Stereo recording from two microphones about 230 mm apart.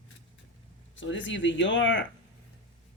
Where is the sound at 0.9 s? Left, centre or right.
Left.